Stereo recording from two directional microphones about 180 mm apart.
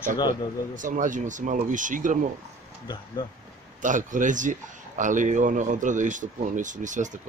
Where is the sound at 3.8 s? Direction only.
45° right (ahead or behind).